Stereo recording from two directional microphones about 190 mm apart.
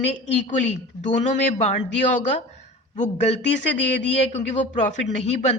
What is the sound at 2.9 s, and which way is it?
A woman's voice, 35° left (ahead or behind).